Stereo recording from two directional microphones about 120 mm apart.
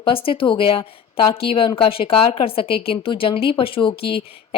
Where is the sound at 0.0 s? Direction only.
50° left (ahead or behind).